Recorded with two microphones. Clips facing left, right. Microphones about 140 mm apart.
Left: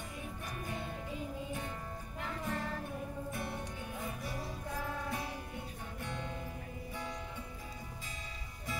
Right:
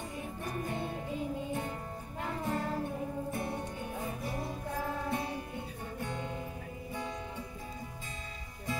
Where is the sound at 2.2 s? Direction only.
35° right (ahead or behind).